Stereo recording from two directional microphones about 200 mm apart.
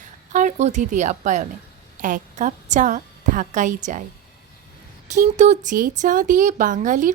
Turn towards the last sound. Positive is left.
turn(degrees=-40)  # may be behind; listen again after turning